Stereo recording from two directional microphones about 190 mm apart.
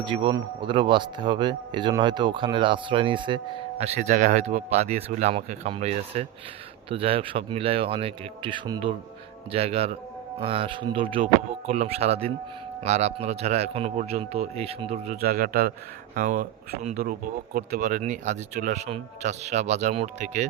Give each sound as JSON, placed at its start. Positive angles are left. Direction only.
{"t": 0.0, "sound": "speech", "side_deg": -25}